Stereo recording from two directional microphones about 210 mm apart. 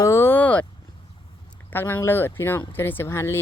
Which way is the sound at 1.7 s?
10° left (ahead or behind).